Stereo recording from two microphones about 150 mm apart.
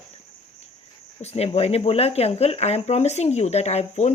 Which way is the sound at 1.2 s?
45° left (ahead or behind).